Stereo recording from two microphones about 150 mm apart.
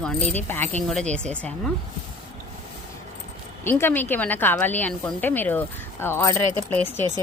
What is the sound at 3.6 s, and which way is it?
A woman's voice, 15° left (ahead or behind).